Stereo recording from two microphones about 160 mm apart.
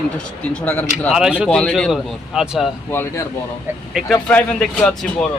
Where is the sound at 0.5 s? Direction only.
10° left (ahead or behind).